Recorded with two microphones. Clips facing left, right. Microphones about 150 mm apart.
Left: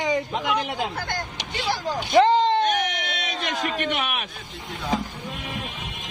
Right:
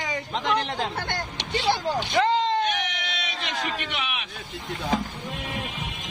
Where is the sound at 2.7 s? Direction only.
45° left (ahead or behind).